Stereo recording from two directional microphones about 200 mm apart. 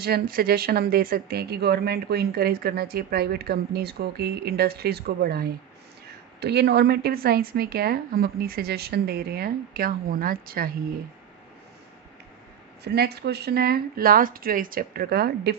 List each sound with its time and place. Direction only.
0.0 s speech: 50° right (ahead or behind)
12.8 s speech: 55° right (ahead or behind)